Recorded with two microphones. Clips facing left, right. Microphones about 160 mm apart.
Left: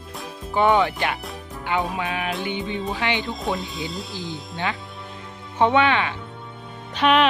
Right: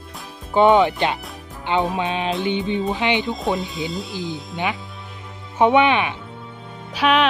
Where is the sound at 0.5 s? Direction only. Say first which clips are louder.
Right 4 dB; 20° right (ahead or behind).